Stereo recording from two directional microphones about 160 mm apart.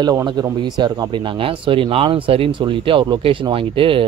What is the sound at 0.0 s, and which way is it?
A man's voice, 25° right (ahead or behind).